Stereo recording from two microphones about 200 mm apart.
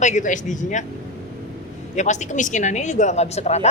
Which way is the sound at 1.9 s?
35° left (ahead or behind).